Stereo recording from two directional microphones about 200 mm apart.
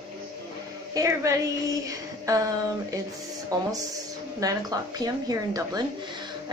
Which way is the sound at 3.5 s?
20° right (ahead or behind).